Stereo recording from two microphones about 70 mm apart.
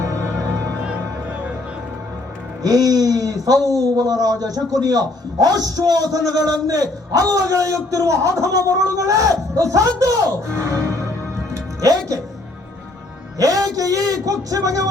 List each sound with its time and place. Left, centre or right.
0.0 s music: right
2.6 s speech: right
11.5 s music: right
13.4 s speech: right